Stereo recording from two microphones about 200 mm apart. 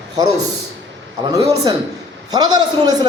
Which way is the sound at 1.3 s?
15° right (ahead or behind).